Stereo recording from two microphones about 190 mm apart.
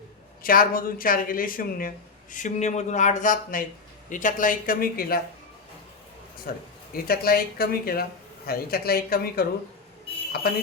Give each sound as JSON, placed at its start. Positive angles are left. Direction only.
{"t": 0.4, "sound": "a woman's voice", "side_deg": 50}
{"t": 6.5, "sound": "a woman's voice", "side_deg": 50}